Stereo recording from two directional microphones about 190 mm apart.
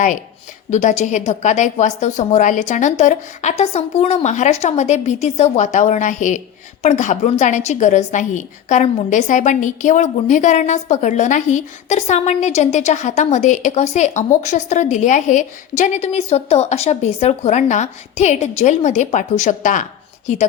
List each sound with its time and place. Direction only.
0.7 s a woman's voice: 40° left (ahead or behind)